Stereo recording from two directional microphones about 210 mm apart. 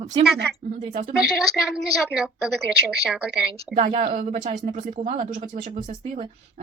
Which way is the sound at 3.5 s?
30° right (ahead or behind).